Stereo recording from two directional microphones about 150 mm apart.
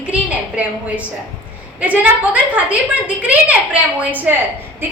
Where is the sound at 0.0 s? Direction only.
10° right (ahead or behind).